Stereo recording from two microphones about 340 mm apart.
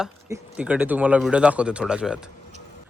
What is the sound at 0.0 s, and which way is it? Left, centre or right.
Speech, centre.